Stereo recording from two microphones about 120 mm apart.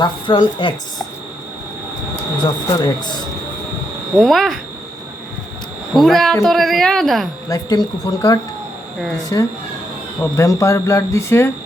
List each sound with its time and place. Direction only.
0.0 s speech: 40° left (ahead or behind)
2.6 s speech: 35° left (ahead or behind)
4.2 s a woman's voice: centre (ahead or behind)
5.9 s a woman's voice: centre (ahead or behind)
7.5 s speech: 30° left (ahead or behind)